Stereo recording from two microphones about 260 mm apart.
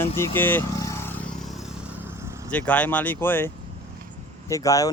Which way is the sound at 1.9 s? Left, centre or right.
Centre.